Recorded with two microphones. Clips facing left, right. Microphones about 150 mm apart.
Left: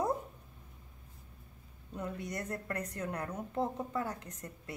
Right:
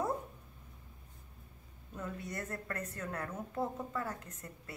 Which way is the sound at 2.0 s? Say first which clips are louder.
Left 2 dB; 20° left (ahead or behind).